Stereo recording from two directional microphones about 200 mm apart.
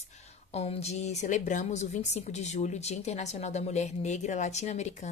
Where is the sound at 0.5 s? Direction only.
30° left (ahead or behind).